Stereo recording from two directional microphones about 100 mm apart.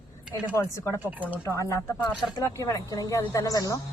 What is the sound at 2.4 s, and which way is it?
A woman's voice, 35° left (ahead or behind).